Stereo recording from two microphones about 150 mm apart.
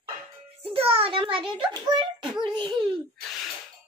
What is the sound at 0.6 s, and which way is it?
A child's voice, 40° right (ahead or behind).